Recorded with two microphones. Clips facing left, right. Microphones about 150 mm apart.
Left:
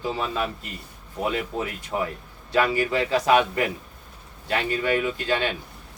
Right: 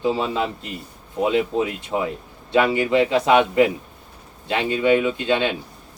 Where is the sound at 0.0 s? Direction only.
20° right (ahead or behind).